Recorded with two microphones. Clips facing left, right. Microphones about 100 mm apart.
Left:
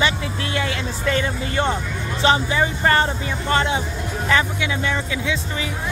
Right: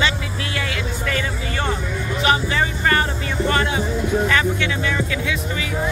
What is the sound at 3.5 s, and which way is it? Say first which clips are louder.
Speech: left 3 dB; 25° left (ahead or behind).